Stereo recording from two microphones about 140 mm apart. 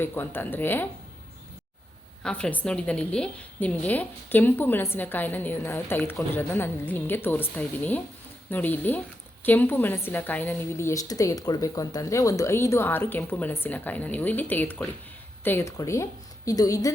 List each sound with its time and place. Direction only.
0.0 s a woman's voice: 15° left (ahead or behind)
2.2 s a woman's voice: 10° left (ahead or behind); by 16.9 s 25° left (ahead or behind)